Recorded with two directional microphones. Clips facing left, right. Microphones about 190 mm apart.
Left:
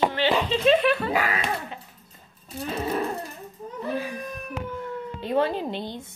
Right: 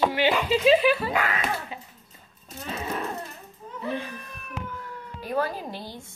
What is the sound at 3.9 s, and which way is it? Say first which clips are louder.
Baby cry: left 4 dB; 10° left (ahead or behind).